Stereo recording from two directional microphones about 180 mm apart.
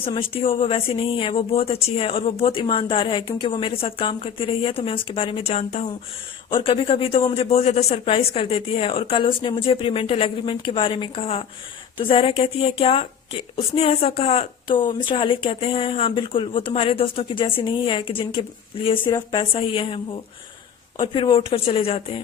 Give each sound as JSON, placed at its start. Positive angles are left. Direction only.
{"t": 0.1, "sound": "speech", "side_deg": 30}
{"t": 21.0, "sound": "speech", "side_deg": 25}